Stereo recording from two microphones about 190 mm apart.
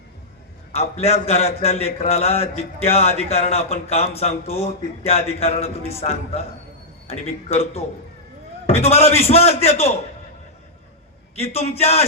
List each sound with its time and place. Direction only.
0.7 s a man's voice: 35° left (ahead or behind)
11.3 s a man's voice: 35° left (ahead or behind)